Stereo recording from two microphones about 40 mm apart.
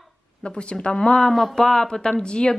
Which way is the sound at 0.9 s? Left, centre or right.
Centre.